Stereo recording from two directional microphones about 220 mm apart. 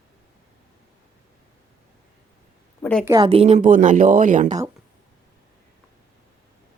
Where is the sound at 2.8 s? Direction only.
5° left (ahead or behind).